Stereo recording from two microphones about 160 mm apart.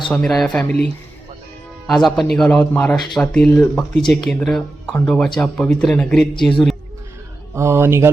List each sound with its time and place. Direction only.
0.1 s speech: 5° left (ahead or behind)
1.9 s speech: centre (ahead or behind)
7.5 s speech: 15° right (ahead or behind)